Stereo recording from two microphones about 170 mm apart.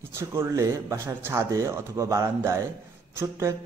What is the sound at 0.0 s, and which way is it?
Speech, 15° right (ahead or behind).